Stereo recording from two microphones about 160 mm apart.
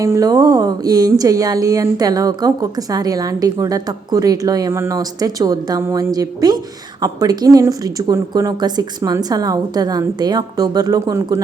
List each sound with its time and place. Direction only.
0.0 s speech: 20° right (ahead or behind)